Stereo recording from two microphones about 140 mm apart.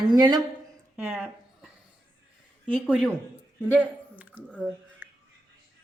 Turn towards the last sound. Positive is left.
turn(degrees=-10)  # may be behind; listen again after turning